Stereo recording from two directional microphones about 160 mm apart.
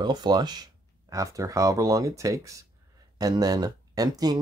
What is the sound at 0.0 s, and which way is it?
Speech, 25° right (ahead or behind).